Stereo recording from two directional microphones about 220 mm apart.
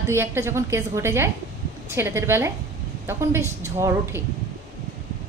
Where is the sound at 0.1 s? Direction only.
10° right (ahead or behind).